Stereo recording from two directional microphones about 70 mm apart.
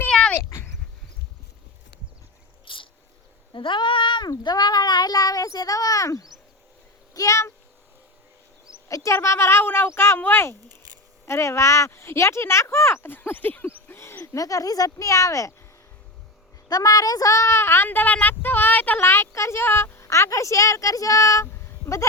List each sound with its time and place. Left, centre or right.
0.1 s dog: centre
0.3 s dog: left
4.4 s speech: left
8.9 s speech: left
13.7 s a sound: left
14.3 s speech: left
16.6 s speech: left
17.8 s speech: left
19.0 s speech: left
20.1 s speech: left